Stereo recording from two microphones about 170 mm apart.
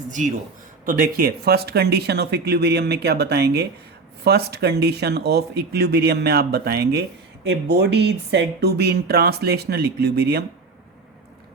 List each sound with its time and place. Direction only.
0.9 s speech: 55° right (ahead or behind)
7.4 s speech: 90° right; by 10.4 s 70° right (ahead or behind)